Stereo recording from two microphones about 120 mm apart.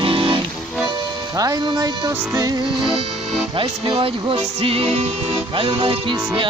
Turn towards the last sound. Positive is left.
turn(degrees=-40)  # may be behind; listen again after turning